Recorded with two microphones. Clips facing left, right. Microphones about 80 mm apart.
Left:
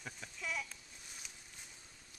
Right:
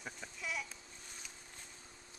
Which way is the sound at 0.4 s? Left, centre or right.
Centre.